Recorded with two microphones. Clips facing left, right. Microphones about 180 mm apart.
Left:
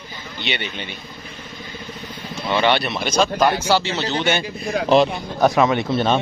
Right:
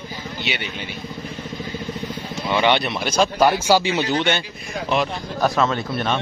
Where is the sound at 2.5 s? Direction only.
15° right (ahead or behind).